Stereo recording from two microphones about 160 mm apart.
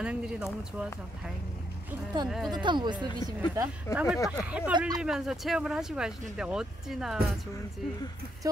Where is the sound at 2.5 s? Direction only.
30° right (ahead or behind).